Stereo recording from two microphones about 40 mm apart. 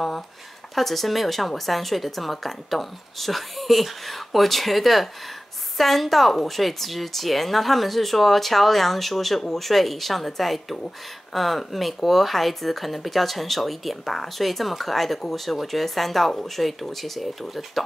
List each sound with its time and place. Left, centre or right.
0.7 s speech: centre